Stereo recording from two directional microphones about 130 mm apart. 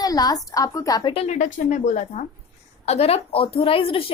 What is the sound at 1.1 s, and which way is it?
Speech, 60° left (ahead or behind).